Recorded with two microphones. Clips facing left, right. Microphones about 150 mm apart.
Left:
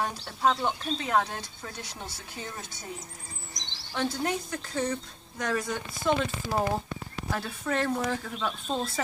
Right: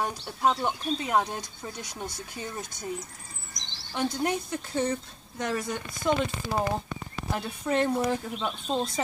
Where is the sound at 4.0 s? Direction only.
20° right (ahead or behind).